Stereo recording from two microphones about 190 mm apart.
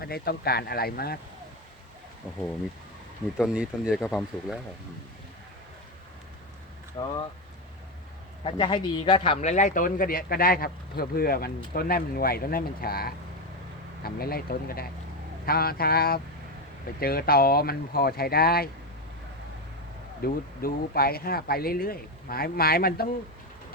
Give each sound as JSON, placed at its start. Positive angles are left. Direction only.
{"t": 0.0, "sound": "speech", "side_deg": 55}
{"t": 3.3, "sound": "speech", "side_deg": -5}
{"t": 7.0, "sound": "speech", "side_deg": 25}
{"t": 8.4, "sound": "speech", "side_deg": 25}
{"t": 20.2, "sound": "speech", "side_deg": 50}